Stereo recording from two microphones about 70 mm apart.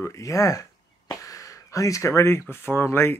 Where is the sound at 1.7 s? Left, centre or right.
Left.